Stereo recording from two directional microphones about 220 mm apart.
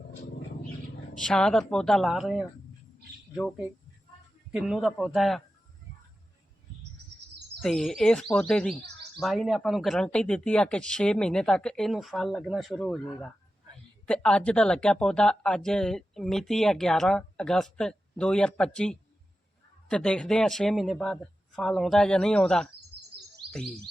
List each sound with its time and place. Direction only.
1.1 s speech: 5° left (ahead or behind)
4.5 s speech: centre (ahead or behind)
7.6 s speech: centre (ahead or behind)
23.4 s bird: 45° right (ahead or behind)